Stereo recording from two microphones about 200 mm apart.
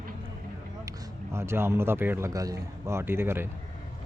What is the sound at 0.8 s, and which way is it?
A man's voice, 15° right (ahead or behind).